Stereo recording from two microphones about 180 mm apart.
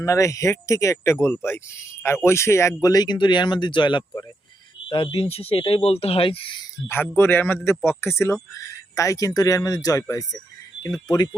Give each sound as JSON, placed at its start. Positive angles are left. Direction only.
{"t": 0.0, "sound": "speech", "side_deg": 15}
{"t": 6.8, "sound": "speech", "side_deg": 10}